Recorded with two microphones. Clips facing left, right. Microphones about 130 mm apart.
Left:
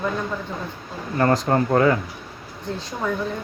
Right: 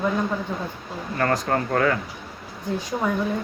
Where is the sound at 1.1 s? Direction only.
20° left (ahead or behind).